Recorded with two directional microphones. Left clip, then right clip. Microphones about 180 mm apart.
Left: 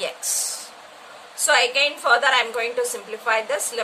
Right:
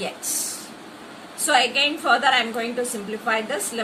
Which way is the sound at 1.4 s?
55° left (ahead or behind).